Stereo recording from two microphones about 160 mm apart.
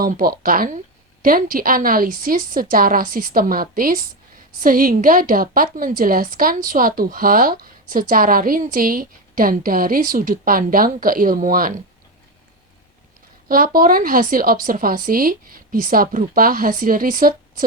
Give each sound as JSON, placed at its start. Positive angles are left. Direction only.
{"t": 0.0, "sound": "a woman's voice", "side_deg": -65}
{"t": 13.5, "sound": "a woman's voice", "side_deg": -60}